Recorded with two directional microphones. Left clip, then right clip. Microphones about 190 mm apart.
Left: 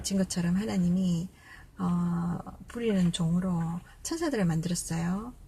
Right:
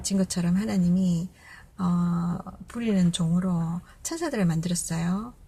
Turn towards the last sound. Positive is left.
turn(degrees=-15)  # may be behind; listen again after turning